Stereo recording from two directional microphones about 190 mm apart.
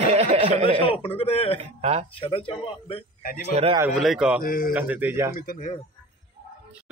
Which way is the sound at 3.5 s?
30° right (ahead or behind).